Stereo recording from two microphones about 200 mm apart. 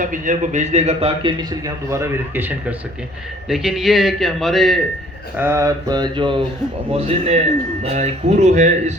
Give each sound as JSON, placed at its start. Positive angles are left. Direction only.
{"t": 0.0, "sound": "a man's voice", "side_deg": -40}
{"t": 5.4, "sound": "a man's voice", "side_deg": -15}